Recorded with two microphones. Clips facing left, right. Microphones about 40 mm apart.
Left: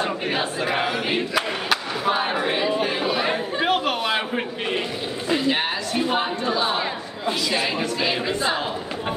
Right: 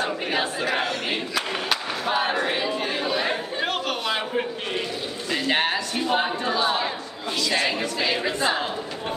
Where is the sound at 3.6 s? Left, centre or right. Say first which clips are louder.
Left 5 dB; centre.